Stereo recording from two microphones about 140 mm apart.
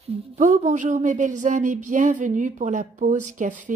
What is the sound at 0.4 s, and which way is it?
A woman's voice, 60° right (ahead or behind).